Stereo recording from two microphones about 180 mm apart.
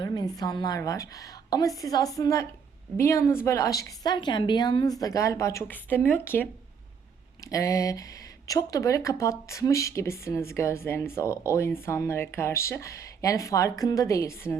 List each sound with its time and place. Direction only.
0.0 s a woman's voice: 20° left (ahead or behind)